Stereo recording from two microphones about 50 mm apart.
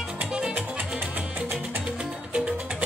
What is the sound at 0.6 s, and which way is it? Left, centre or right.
Music, right.